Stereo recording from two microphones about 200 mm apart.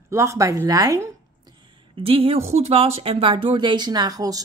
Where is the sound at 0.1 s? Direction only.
15° right (ahead or behind).